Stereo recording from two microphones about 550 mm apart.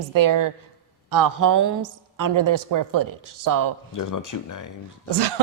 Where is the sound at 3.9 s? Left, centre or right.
Left.